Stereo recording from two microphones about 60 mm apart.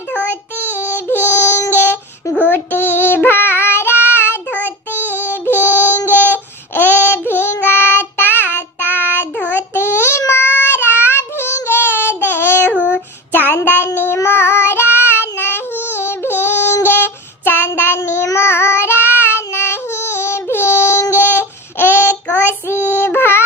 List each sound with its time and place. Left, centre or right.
0.7 s a sound: left
1.7 s child singing: left
4.4 s child singing: left